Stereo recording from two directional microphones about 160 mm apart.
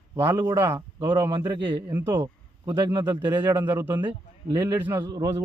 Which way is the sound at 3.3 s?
10° right (ahead or behind).